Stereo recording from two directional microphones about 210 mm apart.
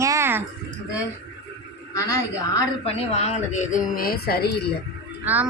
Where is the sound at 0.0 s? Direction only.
15° right (ahead or behind).